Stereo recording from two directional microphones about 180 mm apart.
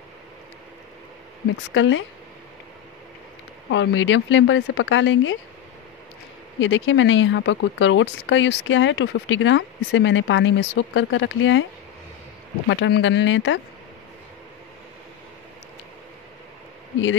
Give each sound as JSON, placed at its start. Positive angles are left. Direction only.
{"t": 1.7, "sound": "speech", "side_deg": 90}
{"t": 3.7, "sound": "speech", "side_deg": 90}
{"t": 6.6, "sound": "speech", "side_deg": 90}
{"t": 12.8, "sound": "speech", "side_deg": 80}